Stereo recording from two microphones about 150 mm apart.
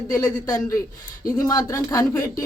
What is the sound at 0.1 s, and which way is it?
Speech, 20° left (ahead or behind).